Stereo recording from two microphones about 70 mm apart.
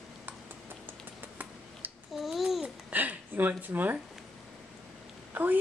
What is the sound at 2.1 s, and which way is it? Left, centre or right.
Babbling, centre.